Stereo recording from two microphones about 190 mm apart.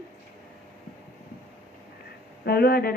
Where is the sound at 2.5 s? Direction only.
55° left (ahead or behind).